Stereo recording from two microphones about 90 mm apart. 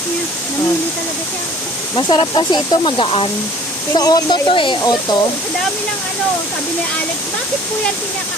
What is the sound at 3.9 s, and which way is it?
Speech, 50° left (ahead or behind).